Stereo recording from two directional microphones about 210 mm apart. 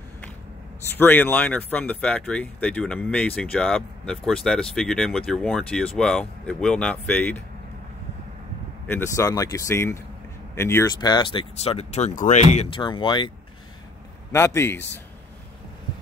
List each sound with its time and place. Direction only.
0.8 s speech: 10° left (ahead or behind)
8.8 s speech: 10° left (ahead or behind)
11.5 s speech: 30° left (ahead or behind)
14.3 s speech: 10° left (ahead or behind)